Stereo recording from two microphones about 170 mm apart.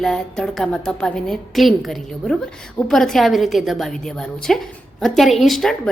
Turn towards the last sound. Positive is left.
turn(degrees=0)  # may be behind; listen again after turning